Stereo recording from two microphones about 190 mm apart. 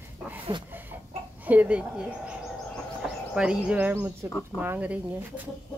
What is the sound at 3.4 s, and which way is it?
Speech, 5° right (ahead or behind).